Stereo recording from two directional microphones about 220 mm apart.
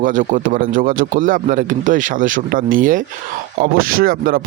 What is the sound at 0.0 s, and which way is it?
Speech, 35° right (ahead or behind).